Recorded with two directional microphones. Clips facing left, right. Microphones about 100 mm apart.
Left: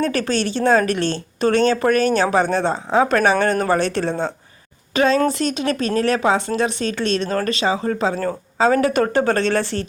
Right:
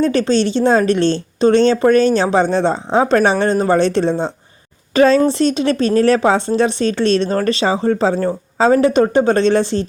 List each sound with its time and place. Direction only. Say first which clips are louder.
0.1 s a woman's voice: right 6 dB; 25° right (ahead or behind)